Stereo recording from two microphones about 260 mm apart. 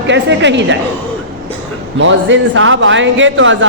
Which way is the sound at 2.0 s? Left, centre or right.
Right.